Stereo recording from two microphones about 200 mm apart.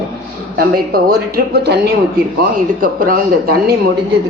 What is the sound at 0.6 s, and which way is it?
Speech, 50° right (ahead or behind).